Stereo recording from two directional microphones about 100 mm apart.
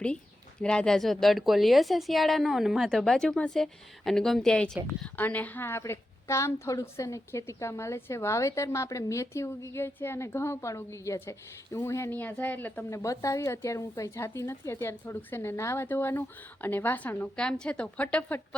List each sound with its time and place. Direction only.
0.6 s a woman's voice: 10° left (ahead or behind)
4.9 s a woman's voice: 20° left (ahead or behind)
12.2 s speech: 15° left (ahead or behind)
12.9 s a woman's voice: 30° left (ahead or behind); by 18.3 s 15° left (ahead or behind)